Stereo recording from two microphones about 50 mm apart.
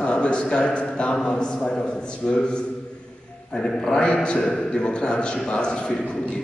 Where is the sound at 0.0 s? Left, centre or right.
Left.